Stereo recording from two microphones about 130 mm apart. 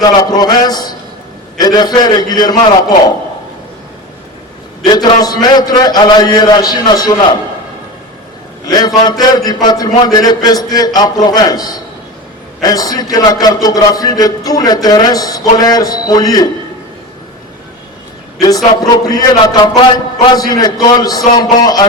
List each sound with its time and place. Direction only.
0.0 s a man's voice: 30° left (ahead or behind)
4.9 s a man's voice: 30° left (ahead or behind)
8.6 s a man's voice: 30° left (ahead or behind)
18.3 s a man's voice: 30° left (ahead or behind)